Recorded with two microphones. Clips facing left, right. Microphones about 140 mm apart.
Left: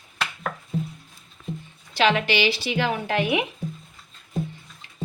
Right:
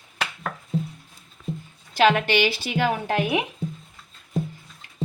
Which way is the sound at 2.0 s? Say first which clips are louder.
Right 2 dB; 50° right (ahead or behind).